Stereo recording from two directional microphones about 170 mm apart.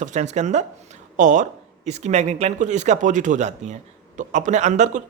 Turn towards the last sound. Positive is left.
turn(degrees=-45)  # may be behind; listen again after turning